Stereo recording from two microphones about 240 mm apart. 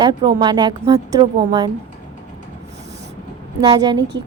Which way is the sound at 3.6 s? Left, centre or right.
Centre.